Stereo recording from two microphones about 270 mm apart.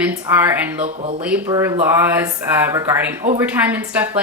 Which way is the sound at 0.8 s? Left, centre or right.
Right.